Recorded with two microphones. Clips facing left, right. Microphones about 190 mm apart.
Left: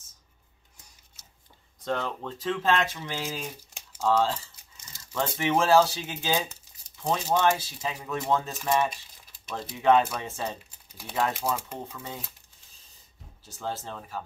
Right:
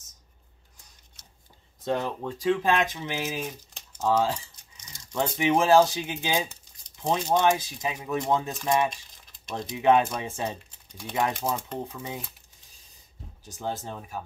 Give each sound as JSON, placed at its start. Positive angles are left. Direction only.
{"t": 1.9, "sound": "speech", "side_deg": -15}
{"t": 8.9, "sound": "a sound", "side_deg": 5}
{"t": 9.8, "sound": "speech", "side_deg": -15}
{"t": 10.7, "sound": "typing", "side_deg": 5}
{"t": 11.8, "sound": "speech", "side_deg": -10}
{"t": 13.5, "sound": "speech", "side_deg": -15}